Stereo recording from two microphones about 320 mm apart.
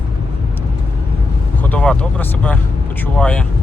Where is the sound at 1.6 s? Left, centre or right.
Centre.